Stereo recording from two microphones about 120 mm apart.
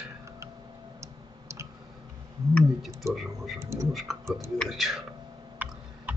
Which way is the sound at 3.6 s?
25° right (ahead or behind).